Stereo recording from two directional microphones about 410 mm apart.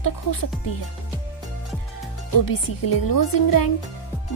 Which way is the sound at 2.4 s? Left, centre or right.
Left.